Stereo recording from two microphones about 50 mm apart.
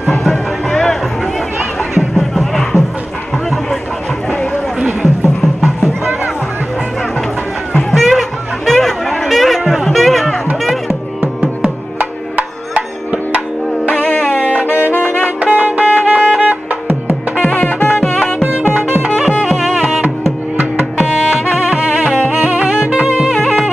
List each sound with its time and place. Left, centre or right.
0.0 s music: centre
1.6 s music: centre
4.7 s music: centre
7.9 s chatter: centre
11.6 s music: right
14.7 s music: left
15.5 s music: right
17.4 s music: left
18.0 s music: centre
19.4 s music: centre
21.6 s music: centre
23.1 s music: centre